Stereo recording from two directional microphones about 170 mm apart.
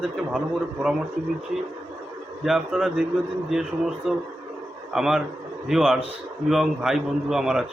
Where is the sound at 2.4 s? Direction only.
Centre (ahead or behind).